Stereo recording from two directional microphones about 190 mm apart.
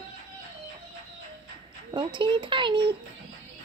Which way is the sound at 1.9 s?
25° right (ahead or behind).